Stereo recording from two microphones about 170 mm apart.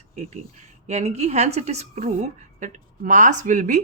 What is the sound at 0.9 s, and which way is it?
Speech, 40° right (ahead or behind).